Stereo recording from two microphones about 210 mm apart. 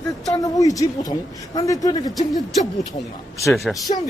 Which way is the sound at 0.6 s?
15° left (ahead or behind).